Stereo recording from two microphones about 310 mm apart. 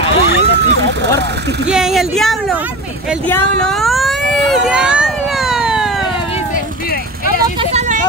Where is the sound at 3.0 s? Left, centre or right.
Centre.